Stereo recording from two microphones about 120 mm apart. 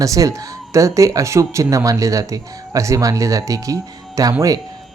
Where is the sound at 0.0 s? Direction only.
25° right (ahead or behind).